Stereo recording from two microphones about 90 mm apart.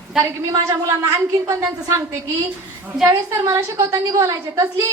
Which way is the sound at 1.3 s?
35° right (ahead or behind).